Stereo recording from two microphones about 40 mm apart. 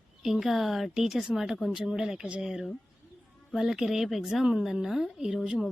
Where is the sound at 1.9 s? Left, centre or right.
Centre.